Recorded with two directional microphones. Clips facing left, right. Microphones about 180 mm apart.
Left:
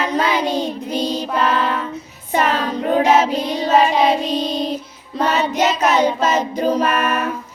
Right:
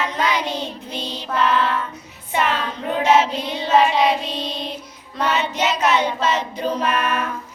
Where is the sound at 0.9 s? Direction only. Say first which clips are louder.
Left 9 dB; 40° left (ahead or behind).